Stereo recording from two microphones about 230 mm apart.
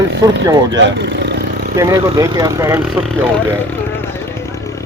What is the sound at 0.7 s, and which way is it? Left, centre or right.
Speech, right.